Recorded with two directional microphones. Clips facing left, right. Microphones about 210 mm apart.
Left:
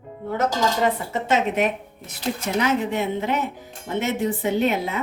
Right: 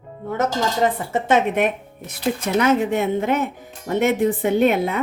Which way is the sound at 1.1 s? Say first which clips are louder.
Right 3 dB; 55° right (ahead or behind).